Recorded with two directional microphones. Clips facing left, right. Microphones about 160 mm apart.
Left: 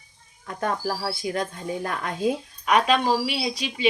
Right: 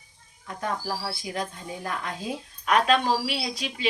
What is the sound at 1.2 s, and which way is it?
Speech, 55° left (ahead or behind).